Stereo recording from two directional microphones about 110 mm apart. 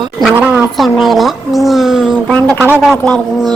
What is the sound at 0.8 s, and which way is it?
Speech, centre (ahead or behind).